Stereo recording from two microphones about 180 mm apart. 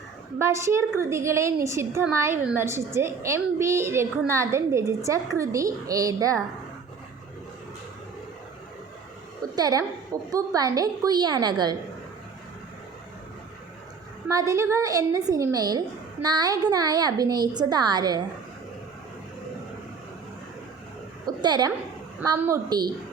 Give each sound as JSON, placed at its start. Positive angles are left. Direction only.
{"t": 0.3, "sound": "a woman's voice", "side_deg": -15}
{"t": 9.6, "sound": "a woman's voice", "side_deg": -20}
{"t": 14.3, "sound": "a woman's voice", "side_deg": -20}
{"t": 21.2, "sound": "a sound", "side_deg": -25}
{"t": 22.2, "sound": "a woman's voice", "side_deg": -15}